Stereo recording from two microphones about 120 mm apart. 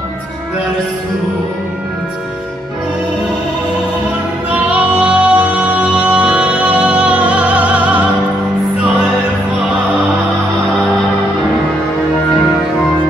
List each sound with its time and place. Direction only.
4.6 s music: 10° right (ahead or behind)